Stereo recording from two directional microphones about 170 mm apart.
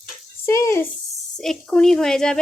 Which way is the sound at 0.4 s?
15° left (ahead or behind).